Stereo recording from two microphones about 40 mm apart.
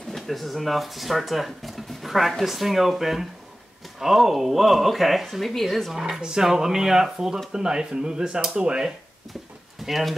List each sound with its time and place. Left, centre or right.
0.1 s speech: centre
5.9 s speech: centre
9.8 s speech: centre